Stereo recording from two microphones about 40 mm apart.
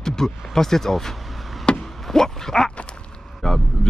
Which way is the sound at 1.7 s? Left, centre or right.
Left.